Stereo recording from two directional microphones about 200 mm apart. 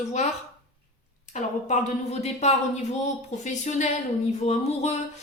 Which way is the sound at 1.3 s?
35° left (ahead or behind).